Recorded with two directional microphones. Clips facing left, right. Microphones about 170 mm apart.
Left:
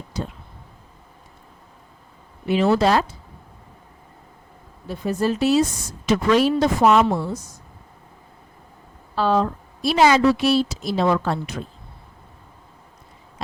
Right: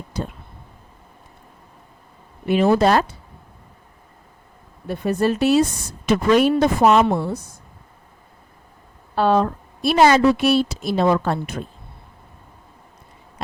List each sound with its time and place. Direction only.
0.1 s a woman's voice: 55° right (ahead or behind)
2.5 s a woman's voice: 50° right (ahead or behind)
4.9 s a woman's voice: 60° right (ahead or behind)
9.1 s a woman's voice: 55° right (ahead or behind)